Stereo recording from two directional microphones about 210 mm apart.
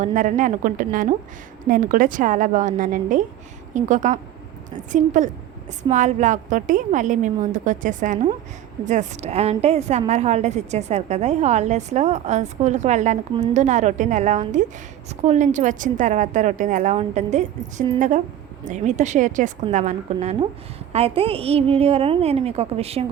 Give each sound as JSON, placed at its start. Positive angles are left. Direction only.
{"t": 0.0, "sound": "a woman's voice", "side_deg": -35}